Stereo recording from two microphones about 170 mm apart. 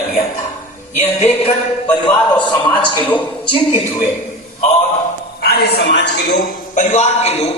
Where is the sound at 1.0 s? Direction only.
40° left (ahead or behind).